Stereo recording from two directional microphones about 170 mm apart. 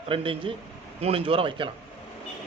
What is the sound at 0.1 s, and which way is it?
A man's voice, 30° right (ahead or behind).